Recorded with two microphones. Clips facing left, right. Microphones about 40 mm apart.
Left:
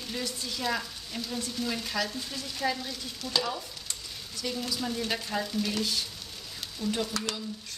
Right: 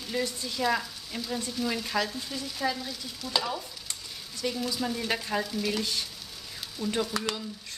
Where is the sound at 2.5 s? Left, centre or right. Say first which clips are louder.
Left 1 dB; centre.